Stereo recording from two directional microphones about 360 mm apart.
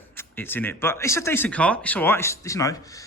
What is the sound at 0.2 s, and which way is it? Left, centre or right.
Speech, centre.